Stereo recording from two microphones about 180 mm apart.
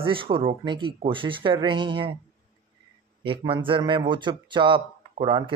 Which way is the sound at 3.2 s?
30° right (ahead or behind).